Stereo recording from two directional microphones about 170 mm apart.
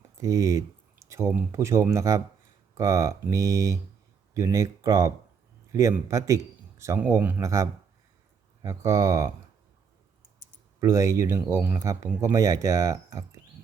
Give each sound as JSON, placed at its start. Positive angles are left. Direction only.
{"t": 0.2, "sound": "speech", "side_deg": -20}
{"t": 10.8, "sound": "speech", "side_deg": -20}